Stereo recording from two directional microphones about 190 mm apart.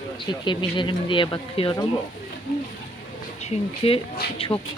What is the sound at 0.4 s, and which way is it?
Speech, 25° left (ahead or behind).